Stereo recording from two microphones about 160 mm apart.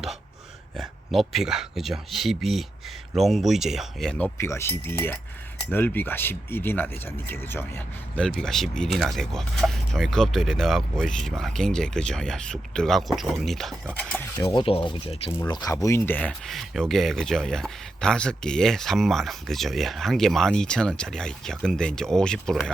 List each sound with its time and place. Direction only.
0.8 s speech: centre (ahead or behind)
8.4 s speech: centre (ahead or behind)
14.4 s speech: 35° left (ahead or behind)
15.3 s speech: 20° left (ahead or behind); by 22.7 s 5° left (ahead or behind)